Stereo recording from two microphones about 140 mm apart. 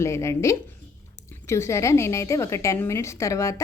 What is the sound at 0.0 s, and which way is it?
A woman's voice, 20° left (ahead or behind).